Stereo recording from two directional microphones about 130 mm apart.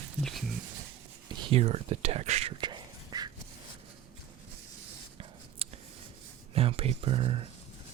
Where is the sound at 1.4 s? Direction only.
45° right (ahead or behind).